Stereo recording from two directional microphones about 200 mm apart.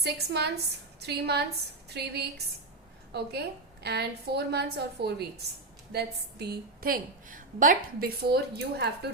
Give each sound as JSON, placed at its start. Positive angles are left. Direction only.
{"t": 0.0, "sound": "a woman's voice", "side_deg": -55}